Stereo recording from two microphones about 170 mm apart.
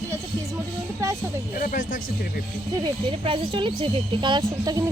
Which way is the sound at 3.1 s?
30° right (ahead or behind).